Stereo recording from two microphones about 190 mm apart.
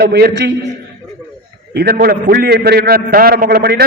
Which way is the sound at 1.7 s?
55° right (ahead or behind).